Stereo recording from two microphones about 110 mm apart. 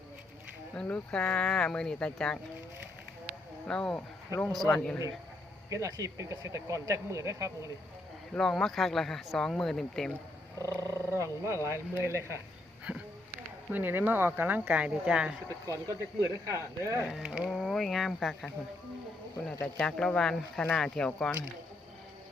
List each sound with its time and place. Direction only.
0.8 s speech: 10° left (ahead or behind)
3.7 s speech: 5° left (ahead or behind)
5.7 s speech: 30° right (ahead or behind)
8.3 s speech: 5° left (ahead or behind)
10.7 s speech: 25° right (ahead or behind)
13.7 s speech: 15° right (ahead or behind)
15.4 s speech: 30° right (ahead or behind)
17.1 s speech: 5° right (ahead or behind)
19.6 s speech: 5° left (ahead or behind)